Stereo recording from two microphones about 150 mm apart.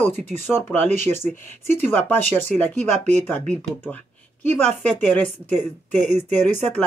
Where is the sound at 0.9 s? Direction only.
50° right (ahead or behind).